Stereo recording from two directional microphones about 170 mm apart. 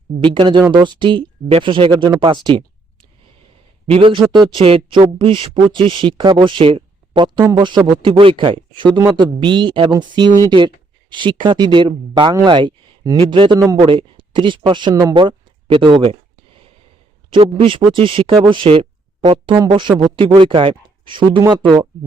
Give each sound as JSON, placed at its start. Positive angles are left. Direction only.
{"t": 0.2, "sound": "speech", "side_deg": -30}
{"t": 3.8, "sound": "speech", "side_deg": -30}
{"t": 17.3, "sound": "speech", "side_deg": -30}